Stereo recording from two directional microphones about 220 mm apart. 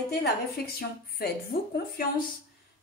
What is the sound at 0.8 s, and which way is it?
Speech, 45° left (ahead or behind).